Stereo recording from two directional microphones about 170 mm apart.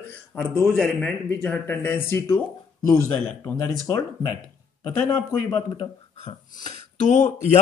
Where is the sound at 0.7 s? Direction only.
5° left (ahead or behind).